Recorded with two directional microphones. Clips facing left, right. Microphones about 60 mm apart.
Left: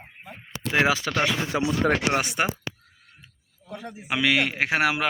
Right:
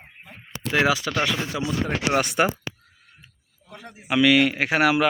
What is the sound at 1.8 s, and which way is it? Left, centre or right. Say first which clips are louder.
Speech: left 6 dB; left.